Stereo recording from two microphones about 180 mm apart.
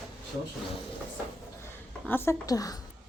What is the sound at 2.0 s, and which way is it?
Speech, 10° left (ahead or behind).